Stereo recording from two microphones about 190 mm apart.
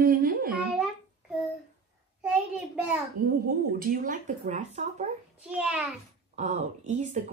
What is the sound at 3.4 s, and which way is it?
Speech, 50° right (ahead or behind).